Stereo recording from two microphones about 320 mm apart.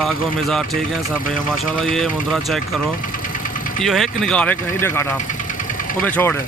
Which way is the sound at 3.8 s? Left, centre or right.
Centre.